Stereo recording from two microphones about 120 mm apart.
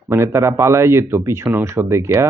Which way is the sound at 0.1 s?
20° right (ahead or behind).